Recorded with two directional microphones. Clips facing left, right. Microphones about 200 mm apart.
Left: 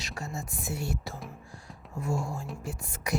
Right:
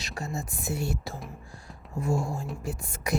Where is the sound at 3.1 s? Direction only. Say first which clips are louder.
Right 2 dB; 25° right (ahead or behind).